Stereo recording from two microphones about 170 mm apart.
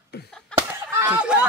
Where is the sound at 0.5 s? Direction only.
10° right (ahead or behind).